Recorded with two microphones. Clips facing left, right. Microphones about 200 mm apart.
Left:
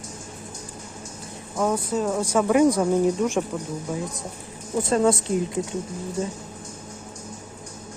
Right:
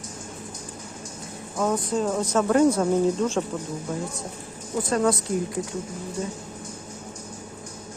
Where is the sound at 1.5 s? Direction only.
5° left (ahead or behind).